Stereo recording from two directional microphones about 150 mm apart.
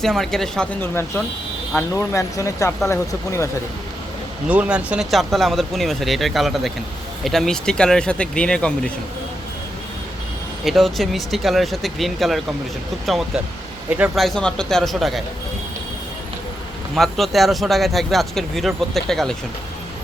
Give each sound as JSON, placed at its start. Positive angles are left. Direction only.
{"t": 0.0, "sound": "speech", "side_deg": 5}
{"t": 4.4, "sound": "speech", "side_deg": -10}
{"t": 10.7, "sound": "speech", "side_deg": 0}
{"t": 14.3, "sound": "speech", "side_deg": 5}
{"t": 16.9, "sound": "speech", "side_deg": 0}